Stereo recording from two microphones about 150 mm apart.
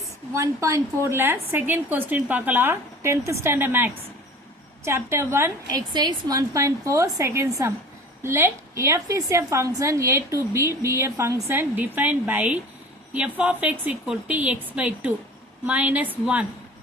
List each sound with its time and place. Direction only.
0.3 s a woman's voice: 20° right (ahead or behind)
5.9 s a woman's voice: 30° right (ahead or behind); by 16.5 s 10° right (ahead or behind)